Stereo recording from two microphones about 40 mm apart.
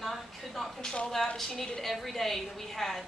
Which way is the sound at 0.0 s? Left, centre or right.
Centre.